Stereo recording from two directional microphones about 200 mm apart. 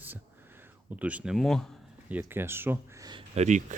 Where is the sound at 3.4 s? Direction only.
35° right (ahead or behind).